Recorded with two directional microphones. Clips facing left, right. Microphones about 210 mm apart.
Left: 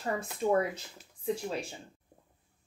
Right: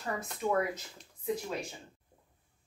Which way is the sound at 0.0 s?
30° left (ahead or behind).